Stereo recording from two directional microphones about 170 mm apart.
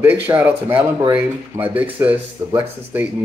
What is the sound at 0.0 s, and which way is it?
Speech, 10° right (ahead or behind).